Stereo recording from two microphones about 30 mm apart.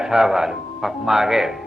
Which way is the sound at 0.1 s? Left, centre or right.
Centre.